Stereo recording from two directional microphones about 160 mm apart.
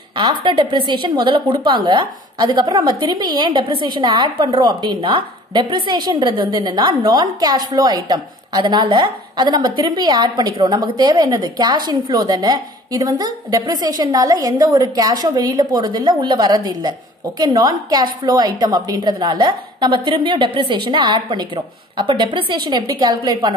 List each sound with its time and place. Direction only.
0.1 s a woman's voice: 30° right (ahead or behind)